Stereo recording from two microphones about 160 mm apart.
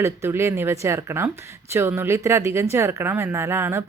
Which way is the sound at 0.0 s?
15° right (ahead or behind).